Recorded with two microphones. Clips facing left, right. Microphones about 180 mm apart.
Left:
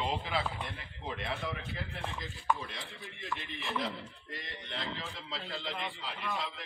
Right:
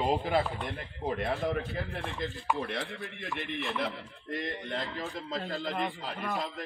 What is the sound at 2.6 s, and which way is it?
Speech, 60° right (ahead or behind).